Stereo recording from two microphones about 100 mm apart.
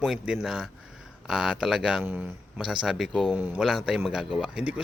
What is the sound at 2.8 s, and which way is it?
A man's voice, 5° right (ahead or behind).